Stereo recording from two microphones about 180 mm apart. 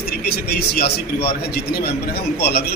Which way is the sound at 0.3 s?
60° left (ahead or behind).